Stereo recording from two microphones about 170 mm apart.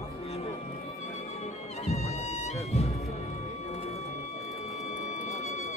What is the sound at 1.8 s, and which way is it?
Music, 40° left (ahead or behind).